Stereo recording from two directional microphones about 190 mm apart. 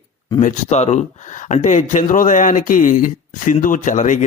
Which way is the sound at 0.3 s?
40° left (ahead or behind).